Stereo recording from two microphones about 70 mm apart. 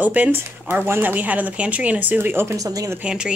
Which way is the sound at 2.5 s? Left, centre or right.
Right.